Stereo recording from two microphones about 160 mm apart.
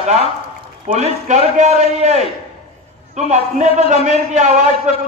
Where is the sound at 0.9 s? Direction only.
45° right (ahead or behind).